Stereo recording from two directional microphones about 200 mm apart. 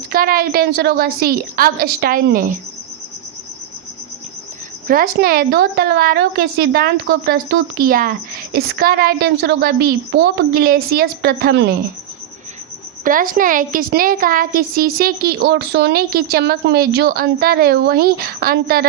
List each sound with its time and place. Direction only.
0.1 s a woman's voice: 45° right (ahead or behind)
4.9 s a woman's voice: 45° right (ahead or behind)
13.1 s a woman's voice: 45° right (ahead or behind)